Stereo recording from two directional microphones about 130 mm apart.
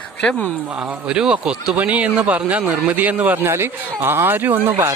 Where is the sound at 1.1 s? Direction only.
5° right (ahead or behind).